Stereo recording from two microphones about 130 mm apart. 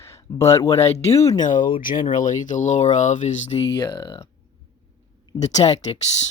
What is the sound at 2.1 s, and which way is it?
Speech, 75° left (ahead or behind).